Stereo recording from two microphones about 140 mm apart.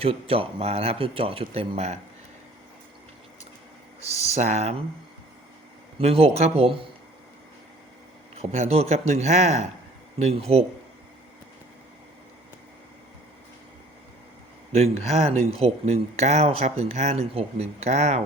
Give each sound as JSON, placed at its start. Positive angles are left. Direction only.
{"t": 0.0, "sound": "speech", "side_deg": -40}
{"t": 4.4, "sound": "speech", "side_deg": -55}
{"t": 6.0, "sound": "speech", "side_deg": -45}
{"t": 8.4, "sound": "speech", "side_deg": -50}
{"t": 14.7, "sound": "speech", "side_deg": -50}